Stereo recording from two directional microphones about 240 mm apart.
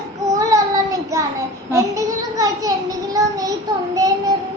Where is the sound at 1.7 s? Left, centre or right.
Centre.